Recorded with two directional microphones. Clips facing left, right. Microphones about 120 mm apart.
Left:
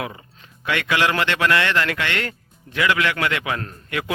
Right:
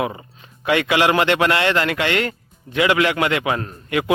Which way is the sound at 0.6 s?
25° right (ahead or behind).